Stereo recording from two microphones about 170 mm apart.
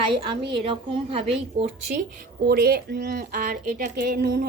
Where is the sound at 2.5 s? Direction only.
65° right (ahead or behind).